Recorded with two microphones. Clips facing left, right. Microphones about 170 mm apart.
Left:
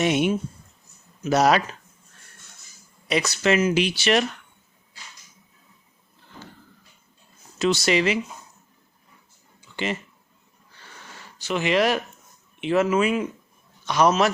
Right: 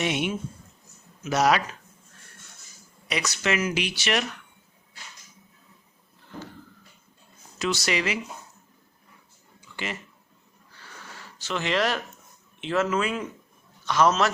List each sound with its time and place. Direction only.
0.0 s speech: 40° left (ahead or behind)
3.1 s speech: 30° left (ahead or behind)
7.6 s speech: 25° left (ahead or behind)
9.7 s speech: 25° left (ahead or behind)
11.3 s speech: 15° left (ahead or behind)